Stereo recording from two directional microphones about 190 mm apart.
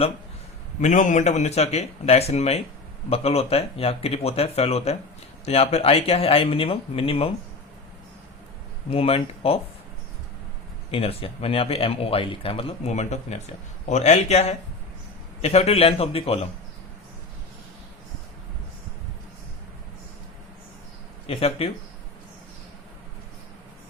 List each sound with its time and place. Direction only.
0.8 s speech: 40° left (ahead or behind)
8.9 s speech: 30° left (ahead or behind)
10.9 s speech: 30° left (ahead or behind)
21.2 s speech: 30° left (ahead or behind)